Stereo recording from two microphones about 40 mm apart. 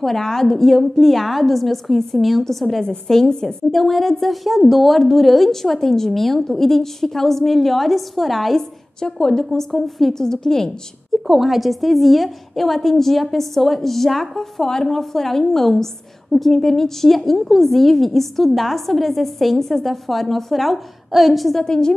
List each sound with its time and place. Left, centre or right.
0.0 s a woman's voice: centre
3.7 s a woman's voice: centre
8.5 s a woman's voice: centre
9.5 s a woman's voice: centre
11.2 s a woman's voice: centre
21.5 s a woman's voice: centre